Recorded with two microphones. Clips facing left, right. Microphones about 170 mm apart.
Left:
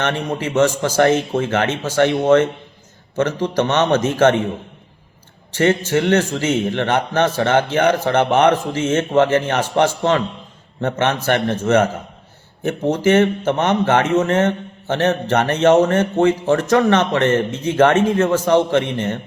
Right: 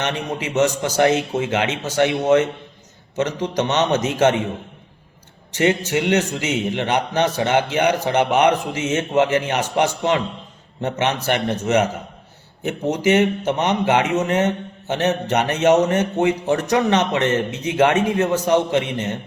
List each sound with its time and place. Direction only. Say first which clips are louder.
0.0 s a man's voice: left 3 dB; 15° right (ahead or behind)
5.5 s a man's voice: left 2 dB; 15° right (ahead or behind)
12.9 s a man's voice: left 2 dB; 15° right (ahead or behind)